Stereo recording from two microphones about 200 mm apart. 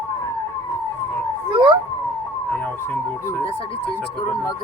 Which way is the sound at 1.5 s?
20° right (ahead or behind).